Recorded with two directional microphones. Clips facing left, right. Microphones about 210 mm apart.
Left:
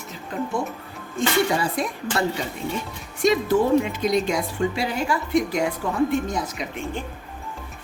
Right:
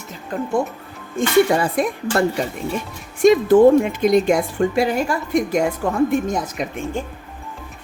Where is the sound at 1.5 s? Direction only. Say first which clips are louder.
Right 5 dB; 55° right (ahead or behind).